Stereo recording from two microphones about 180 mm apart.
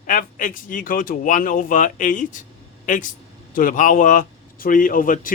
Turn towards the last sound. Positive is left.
turn(degrees=50)  # may be behind; listen again after turning